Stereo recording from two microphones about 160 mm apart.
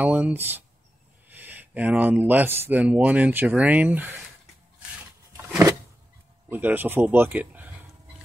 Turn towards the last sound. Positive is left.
turn(degrees=-10)  # may be behind; listen again after turning